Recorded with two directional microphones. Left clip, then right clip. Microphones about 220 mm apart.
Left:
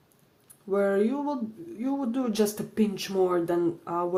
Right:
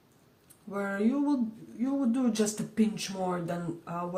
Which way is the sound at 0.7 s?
50° left (ahead or behind).